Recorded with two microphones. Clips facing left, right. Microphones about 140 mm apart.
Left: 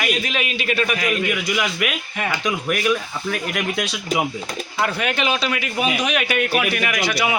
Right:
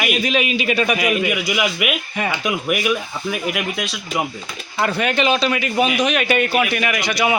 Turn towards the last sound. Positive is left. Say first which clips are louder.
# right 2 dB
turn(degrees=5)  # may be behind; listen again after turning